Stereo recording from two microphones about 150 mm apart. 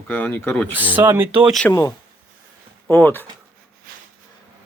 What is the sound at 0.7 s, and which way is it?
Speech, 10° right (ahead or behind).